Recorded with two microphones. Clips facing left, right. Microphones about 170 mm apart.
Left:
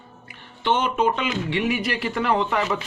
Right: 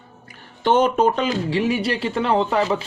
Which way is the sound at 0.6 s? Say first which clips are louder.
Right 5 dB; 40° right (ahead or behind).